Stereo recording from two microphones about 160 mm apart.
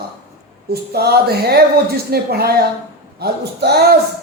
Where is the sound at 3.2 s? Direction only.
90° right.